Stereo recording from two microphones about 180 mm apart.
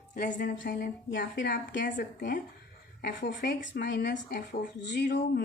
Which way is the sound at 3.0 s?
50° left (ahead or behind).